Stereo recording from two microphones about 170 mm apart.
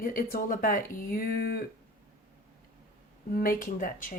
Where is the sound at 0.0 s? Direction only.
55° left (ahead or behind).